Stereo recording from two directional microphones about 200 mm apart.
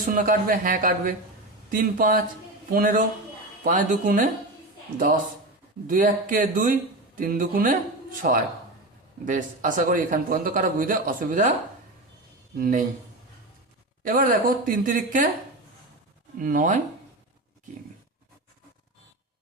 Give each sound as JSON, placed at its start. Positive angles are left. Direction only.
{"t": 0.1, "sound": "a man's voice", "side_deg": -45}
{"t": 12.5, "sound": "a man's voice", "side_deg": -45}
{"t": 14.0, "sound": "a man's voice", "side_deg": -40}
{"t": 16.4, "sound": "a man's voice", "side_deg": -40}